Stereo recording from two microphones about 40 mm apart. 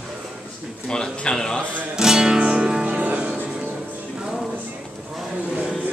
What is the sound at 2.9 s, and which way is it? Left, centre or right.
Music, right.